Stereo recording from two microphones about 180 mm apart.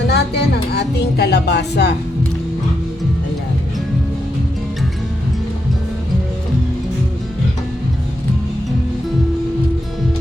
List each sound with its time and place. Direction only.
0.1 s speech: 65° left (ahead or behind)